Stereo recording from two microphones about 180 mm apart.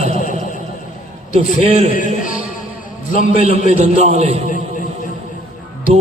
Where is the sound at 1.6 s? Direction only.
35° right (ahead or behind).